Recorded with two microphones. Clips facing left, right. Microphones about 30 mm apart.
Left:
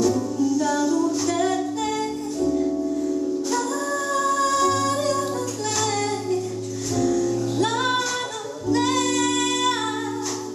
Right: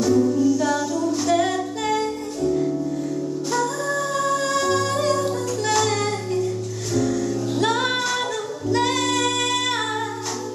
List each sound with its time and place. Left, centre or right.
0.0 s music: centre
6.9 s music: centre